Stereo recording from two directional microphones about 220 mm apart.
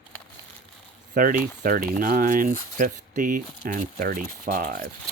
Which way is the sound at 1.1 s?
40° right (ahead or behind).